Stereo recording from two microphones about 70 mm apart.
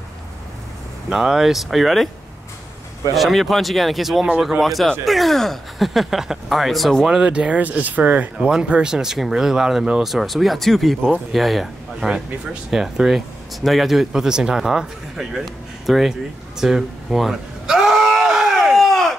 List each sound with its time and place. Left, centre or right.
1.1 s speech: centre
3.2 s speech: centre
7.2 s speech: centre
8.4 s speech: centre